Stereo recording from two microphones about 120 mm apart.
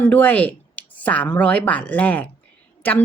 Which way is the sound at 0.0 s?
15° left (ahead or behind).